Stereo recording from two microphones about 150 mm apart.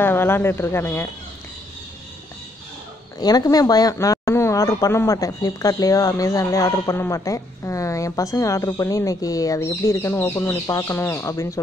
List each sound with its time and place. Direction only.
0.0 s speech: 15° left (ahead or behind)
3.2 s speech: 25° left (ahead or behind)